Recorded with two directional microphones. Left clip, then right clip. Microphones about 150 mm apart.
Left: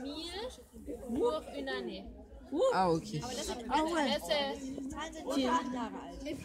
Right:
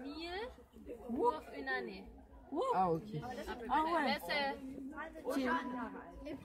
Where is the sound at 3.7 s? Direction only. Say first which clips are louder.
Left 2 dB; 30° right (ahead or behind).